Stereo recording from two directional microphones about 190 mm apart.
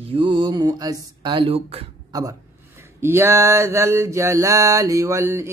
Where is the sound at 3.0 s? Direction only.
15° right (ahead or behind).